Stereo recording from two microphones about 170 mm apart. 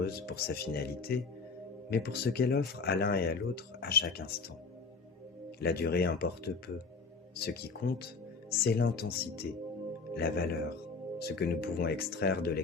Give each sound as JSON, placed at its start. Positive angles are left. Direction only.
{"t": 0.0, "sound": "speech", "side_deg": 70}
{"t": 5.5, "sound": "speech", "side_deg": 70}